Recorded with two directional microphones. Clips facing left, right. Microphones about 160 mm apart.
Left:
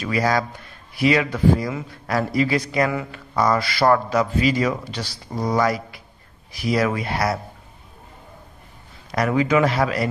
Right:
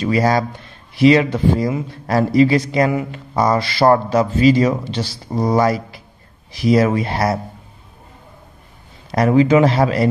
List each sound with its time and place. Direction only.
0.0 s speech: 25° right (ahead or behind)
9.1 s speech: 30° right (ahead or behind)